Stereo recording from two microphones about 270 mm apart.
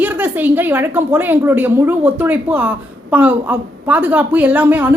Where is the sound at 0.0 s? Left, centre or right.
Centre.